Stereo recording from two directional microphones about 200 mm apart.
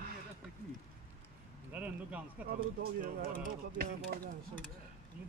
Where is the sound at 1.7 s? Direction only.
10° right (ahead or behind).